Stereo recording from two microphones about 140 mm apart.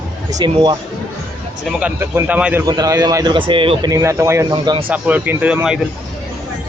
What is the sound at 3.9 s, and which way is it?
Speech, 20° right (ahead or behind).